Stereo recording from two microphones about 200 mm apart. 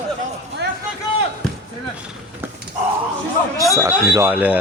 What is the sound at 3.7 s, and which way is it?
Speech, 15° right (ahead or behind).